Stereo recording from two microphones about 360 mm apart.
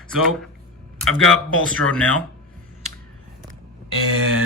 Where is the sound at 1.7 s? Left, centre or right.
Centre.